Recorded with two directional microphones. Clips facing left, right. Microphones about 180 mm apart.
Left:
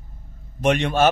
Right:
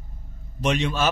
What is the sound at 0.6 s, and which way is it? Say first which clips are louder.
Speech: left 5 dB; 55° left (ahead or behind).